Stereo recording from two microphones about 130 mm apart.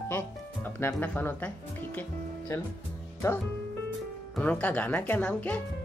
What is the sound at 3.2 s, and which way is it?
Speech, 25° left (ahead or behind).